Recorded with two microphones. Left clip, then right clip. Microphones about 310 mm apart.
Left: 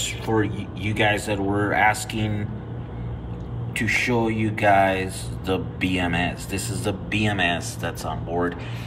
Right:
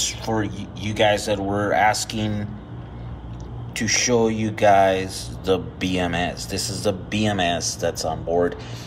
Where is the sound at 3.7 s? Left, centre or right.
Centre.